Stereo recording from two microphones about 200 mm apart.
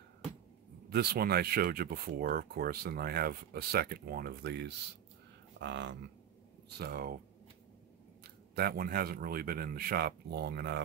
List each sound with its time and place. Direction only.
0.8 s speech: 50° right (ahead or behind)
6.8 s speech: 50° right (ahead or behind)
8.5 s speech: 50° right (ahead or behind)